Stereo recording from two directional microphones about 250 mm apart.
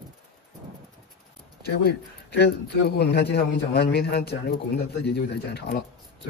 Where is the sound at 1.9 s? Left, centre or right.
Left.